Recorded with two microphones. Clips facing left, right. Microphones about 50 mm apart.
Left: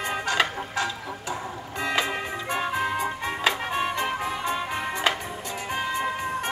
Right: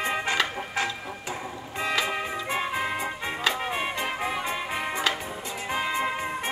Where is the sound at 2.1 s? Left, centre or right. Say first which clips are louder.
Even; centre.